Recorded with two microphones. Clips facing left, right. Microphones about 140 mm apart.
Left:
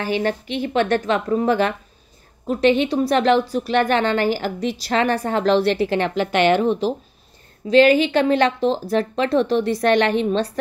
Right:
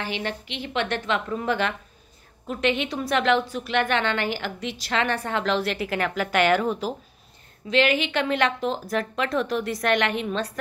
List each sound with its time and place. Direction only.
0.0 s a woman's voice: 45° left (ahead or behind); by 6.9 s 25° left (ahead or behind)
7.6 s a woman's voice: 35° left (ahead or behind)